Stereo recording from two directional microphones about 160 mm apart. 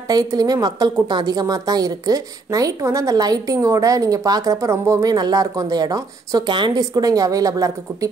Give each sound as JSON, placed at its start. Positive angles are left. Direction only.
{"t": 0.1, "sound": "a woman's voice", "side_deg": -25}